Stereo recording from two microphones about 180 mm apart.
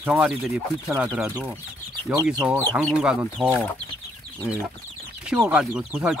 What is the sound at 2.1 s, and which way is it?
Speech, 15° right (ahead or behind).